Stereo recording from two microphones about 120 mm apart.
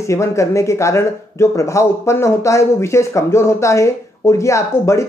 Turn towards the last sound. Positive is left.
turn(degrees=25)  # may be behind; listen again after turning